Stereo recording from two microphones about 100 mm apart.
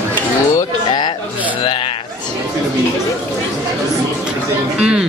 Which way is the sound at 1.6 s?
60° left (ahead or behind).